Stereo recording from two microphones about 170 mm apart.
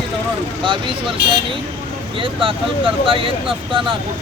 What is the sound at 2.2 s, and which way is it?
Speech, 30° right (ahead or behind).